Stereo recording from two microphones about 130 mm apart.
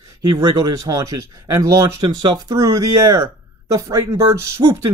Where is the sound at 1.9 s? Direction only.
35° right (ahead or behind).